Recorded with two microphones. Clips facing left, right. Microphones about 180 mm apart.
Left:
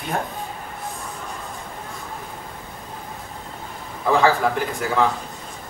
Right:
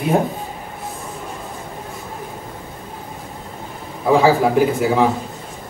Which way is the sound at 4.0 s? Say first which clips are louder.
Right 4 dB; 15° right (ahead or behind).